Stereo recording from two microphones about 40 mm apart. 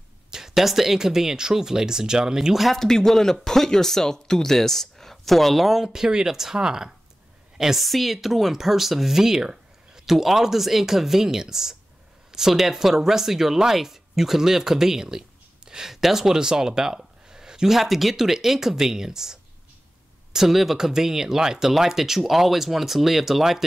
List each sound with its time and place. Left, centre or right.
0.3 s speech: centre
2.5 s speech: centre
2.8 s speech: centre
6.0 s speech: centre
7.5 s speech: centre
10.1 s speech: centre
20.3 s speech: centre